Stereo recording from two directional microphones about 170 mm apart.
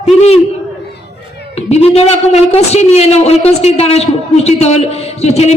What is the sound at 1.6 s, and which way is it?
A man's voice, 40° left (ahead or behind).